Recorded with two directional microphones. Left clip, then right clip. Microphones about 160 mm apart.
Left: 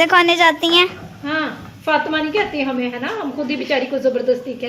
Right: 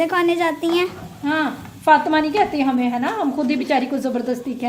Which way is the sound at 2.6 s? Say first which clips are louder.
Right 2 dB; 90° right.